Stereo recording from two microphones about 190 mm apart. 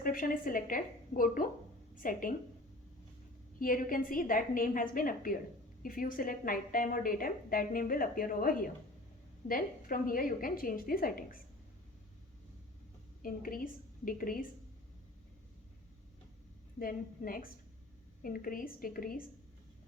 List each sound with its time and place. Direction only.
0.0 s a woman's voice: 50° left (ahead or behind)
3.6 s a woman's voice: 50° left (ahead or behind)
13.2 s a woman's voice: 50° left (ahead or behind)
16.7 s a woman's voice: 50° left (ahead or behind)